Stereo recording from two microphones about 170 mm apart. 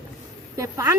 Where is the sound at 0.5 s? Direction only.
15° right (ahead or behind).